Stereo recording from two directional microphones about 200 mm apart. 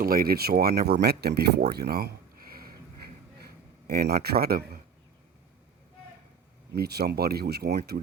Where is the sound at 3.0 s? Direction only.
50° right (ahead or behind).